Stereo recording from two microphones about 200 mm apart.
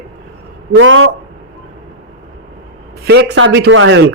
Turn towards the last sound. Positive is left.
turn(degrees=-70)  # may be behind; listen again after turning